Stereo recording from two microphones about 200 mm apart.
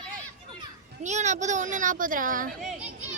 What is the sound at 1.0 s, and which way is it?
Speech, 35° right (ahead or behind).